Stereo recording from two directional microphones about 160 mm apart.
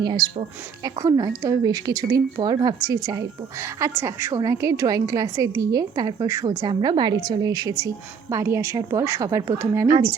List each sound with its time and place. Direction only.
0.2 s speech: centre (ahead or behind)
1.0 s a woman's voice: 25° right (ahead or behind)